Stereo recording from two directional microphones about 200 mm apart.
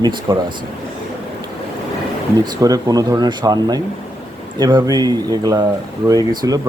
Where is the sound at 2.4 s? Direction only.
20° right (ahead or behind).